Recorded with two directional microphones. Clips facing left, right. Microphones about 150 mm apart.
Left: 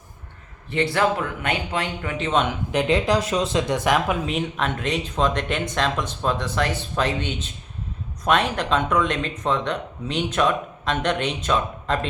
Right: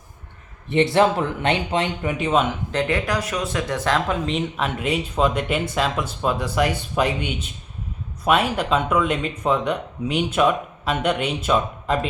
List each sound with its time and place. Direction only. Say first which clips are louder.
0.9 s speech: right 4 dB; 25° right (ahead or behind); by 2.6 s 5° right (ahead or behind)
2.7 s speech: left 3 dB; 20° left (ahead or behind); by 11.9 s 10° right (ahead or behind)